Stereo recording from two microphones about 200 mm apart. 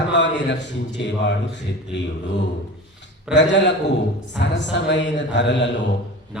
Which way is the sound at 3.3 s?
60° left (ahead or behind).